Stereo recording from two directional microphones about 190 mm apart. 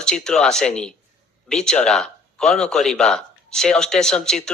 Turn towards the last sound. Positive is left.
turn(degrees=5)  # may be behind; listen again after turning